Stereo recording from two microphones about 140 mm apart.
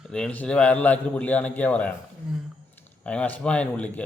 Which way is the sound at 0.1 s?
10° left (ahead or behind).